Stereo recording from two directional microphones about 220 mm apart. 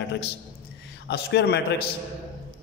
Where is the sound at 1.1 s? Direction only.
50° left (ahead or behind).